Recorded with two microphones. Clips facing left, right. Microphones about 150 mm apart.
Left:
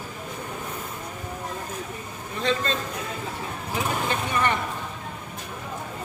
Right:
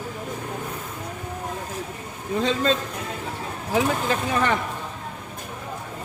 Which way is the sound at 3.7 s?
90° right.